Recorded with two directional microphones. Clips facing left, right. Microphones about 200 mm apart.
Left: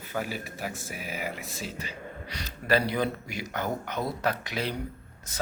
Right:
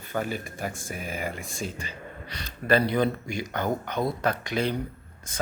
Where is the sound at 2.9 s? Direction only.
5° left (ahead or behind).